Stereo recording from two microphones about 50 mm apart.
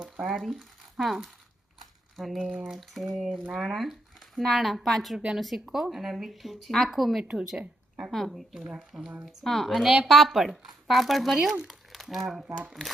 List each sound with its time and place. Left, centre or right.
0.0 s speech: centre
2.4 s a sound: right
2.6 s speech: centre
9.2 s speech: centre
11.7 s crumpling: centre